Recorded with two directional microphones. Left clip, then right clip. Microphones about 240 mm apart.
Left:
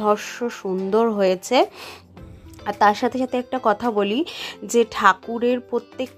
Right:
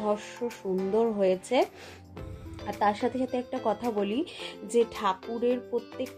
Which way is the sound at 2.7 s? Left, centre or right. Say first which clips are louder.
Left 9 dB; centre.